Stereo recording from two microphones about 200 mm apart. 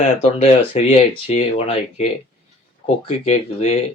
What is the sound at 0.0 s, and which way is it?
Speech, 35° left (ahead or behind).